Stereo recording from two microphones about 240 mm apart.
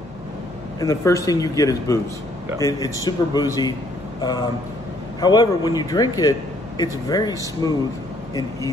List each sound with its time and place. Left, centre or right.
0.7 s a man's voice: centre